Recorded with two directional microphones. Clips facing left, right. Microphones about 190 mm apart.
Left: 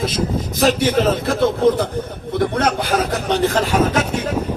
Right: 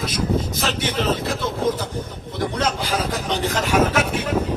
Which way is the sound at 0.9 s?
50° left (ahead or behind).